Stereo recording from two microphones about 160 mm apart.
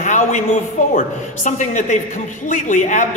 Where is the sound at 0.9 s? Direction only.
55° left (ahead or behind).